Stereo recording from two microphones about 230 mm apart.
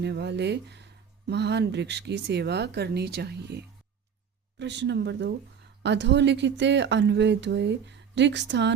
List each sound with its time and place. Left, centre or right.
0.0 s speech: right